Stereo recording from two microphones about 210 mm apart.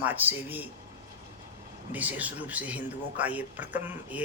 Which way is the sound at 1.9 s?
5° right (ahead or behind).